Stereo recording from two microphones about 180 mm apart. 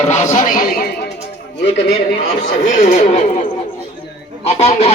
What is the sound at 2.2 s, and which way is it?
Speech, 55° left (ahead or behind).